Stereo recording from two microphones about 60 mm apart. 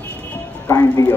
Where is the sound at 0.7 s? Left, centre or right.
Left.